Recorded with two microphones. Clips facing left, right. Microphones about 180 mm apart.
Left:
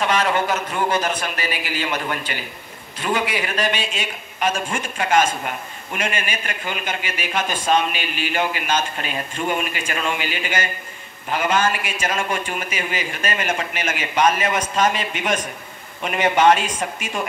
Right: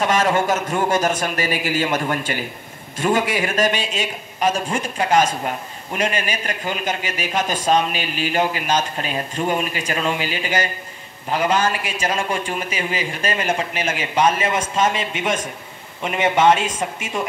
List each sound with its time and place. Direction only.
0.0 s a man's voice: 45° right (ahead or behind); by 17.1 s 25° right (ahead or behind)